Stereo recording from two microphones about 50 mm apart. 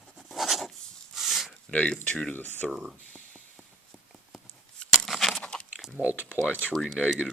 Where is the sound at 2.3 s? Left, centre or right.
Left.